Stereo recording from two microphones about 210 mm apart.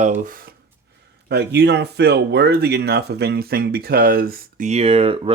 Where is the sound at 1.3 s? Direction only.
50° right (ahead or behind).